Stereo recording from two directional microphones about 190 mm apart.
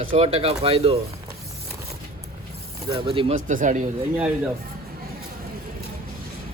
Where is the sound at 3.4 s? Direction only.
40° right (ahead or behind).